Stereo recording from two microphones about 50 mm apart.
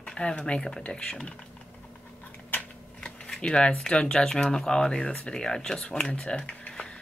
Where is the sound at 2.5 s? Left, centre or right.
Left.